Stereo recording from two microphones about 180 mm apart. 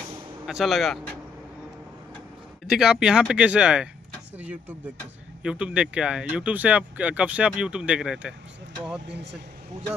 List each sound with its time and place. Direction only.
0.5 s speech: centre (ahead or behind)
2.6 s speech: centre (ahead or behind)
9.0 s speech: 70° right (ahead or behind)